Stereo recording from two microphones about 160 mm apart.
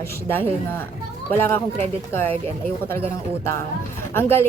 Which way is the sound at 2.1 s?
15° left (ahead or behind).